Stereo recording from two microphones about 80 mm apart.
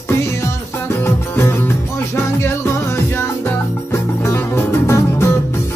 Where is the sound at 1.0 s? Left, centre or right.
Left.